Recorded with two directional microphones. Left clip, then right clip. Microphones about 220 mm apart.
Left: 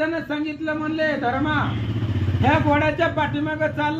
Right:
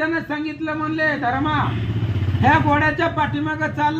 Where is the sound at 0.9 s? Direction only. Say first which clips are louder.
Right 2 dB; 15° right (ahead or behind).